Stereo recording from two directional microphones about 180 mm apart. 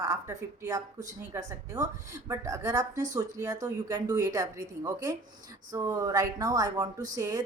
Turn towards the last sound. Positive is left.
turn(degrees=-20)  # may be behind; listen again after turning